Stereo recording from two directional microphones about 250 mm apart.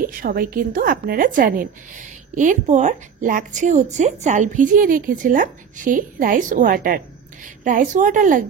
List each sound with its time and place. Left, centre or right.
0.1 s a woman's voice: right